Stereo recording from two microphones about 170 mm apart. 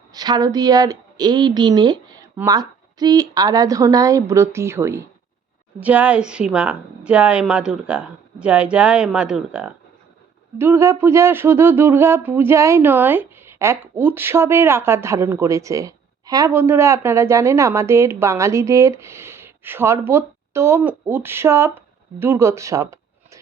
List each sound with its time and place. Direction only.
0.1 s a woman's voice: 25° right (ahead or behind)